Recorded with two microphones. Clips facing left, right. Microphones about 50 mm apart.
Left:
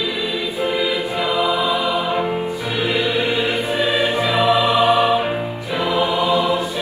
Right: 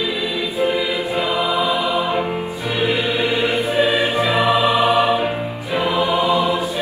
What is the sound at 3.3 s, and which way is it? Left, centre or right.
Choir, right.